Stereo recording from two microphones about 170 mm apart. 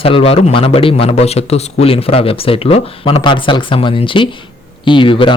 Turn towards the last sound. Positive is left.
turn(degrees=30)  # may be behind; listen again after turning